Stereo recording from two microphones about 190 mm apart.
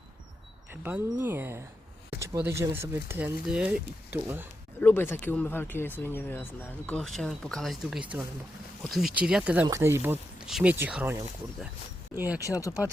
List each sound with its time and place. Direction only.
0.7 s speech: 10° right (ahead or behind)
4.8 s speech: 10° left (ahead or behind); by 12.4 s 10° right (ahead or behind)
12.5 s speech: 15° left (ahead or behind)